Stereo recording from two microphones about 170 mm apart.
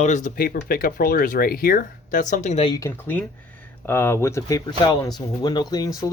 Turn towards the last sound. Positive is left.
turn(degrees=20)  # may be behind; listen again after turning